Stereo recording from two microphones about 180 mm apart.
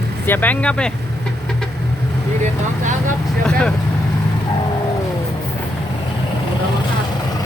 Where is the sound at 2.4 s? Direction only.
45° right (ahead or behind).